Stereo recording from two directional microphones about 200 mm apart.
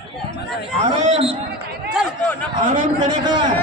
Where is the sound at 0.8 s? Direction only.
35° right (ahead or behind).